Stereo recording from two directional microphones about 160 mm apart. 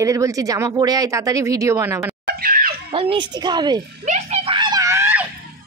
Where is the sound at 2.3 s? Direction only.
65° right (ahead or behind).